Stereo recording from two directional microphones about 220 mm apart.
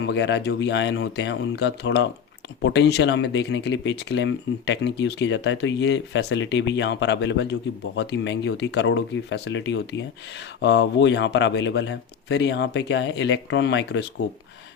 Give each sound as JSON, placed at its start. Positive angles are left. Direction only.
{"t": 0.0, "sound": "speech", "side_deg": 50}